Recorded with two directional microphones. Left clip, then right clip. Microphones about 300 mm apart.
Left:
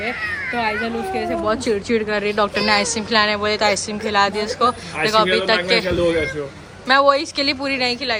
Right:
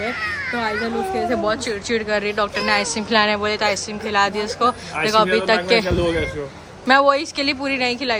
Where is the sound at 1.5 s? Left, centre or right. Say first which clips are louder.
Left 2 dB; centre.